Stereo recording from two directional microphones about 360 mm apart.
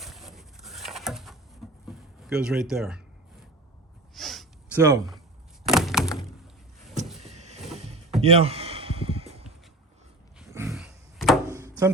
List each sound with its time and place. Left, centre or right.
0.0 s a sound: centre
1.9 s speech: centre
4.1 s snort: centre
5.6 s thunk: centre
7.2 s vehicle: centre
8.2 s a sound: centre